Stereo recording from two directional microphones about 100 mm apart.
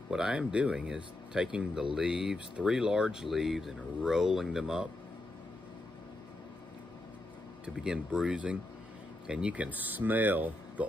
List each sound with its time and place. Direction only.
0.1 s speech: 10° right (ahead or behind)
7.6 s speech: 10° right (ahead or behind)